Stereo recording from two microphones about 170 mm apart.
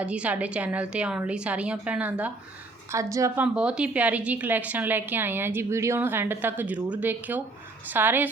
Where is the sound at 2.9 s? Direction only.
20° right (ahead or behind).